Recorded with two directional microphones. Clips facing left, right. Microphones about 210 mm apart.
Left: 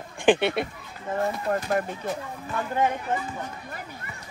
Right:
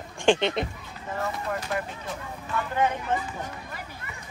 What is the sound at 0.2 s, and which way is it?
Speech, 15° left (ahead or behind).